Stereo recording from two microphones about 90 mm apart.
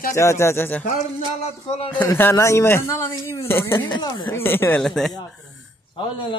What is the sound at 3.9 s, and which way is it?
Speech, 55° left (ahead or behind).